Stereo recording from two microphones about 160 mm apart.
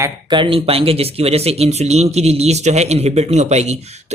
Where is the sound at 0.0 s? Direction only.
30° right (ahead or behind).